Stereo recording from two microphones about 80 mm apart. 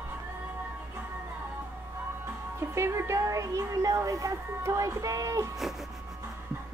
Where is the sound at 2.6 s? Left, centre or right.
Right.